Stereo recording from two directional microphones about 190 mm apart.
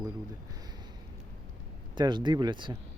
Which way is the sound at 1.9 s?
25° right (ahead or behind).